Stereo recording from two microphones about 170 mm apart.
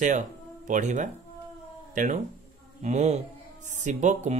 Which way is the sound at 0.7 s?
45° right (ahead or behind).